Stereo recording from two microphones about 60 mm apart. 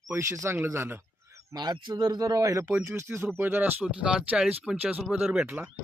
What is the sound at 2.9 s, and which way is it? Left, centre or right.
Speech, right.